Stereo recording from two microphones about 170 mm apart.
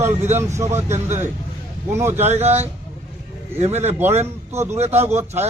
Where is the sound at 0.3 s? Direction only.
15° right (ahead or behind).